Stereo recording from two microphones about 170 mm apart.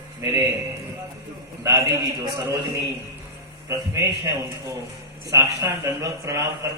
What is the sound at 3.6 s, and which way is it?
Speech, 20° right (ahead or behind).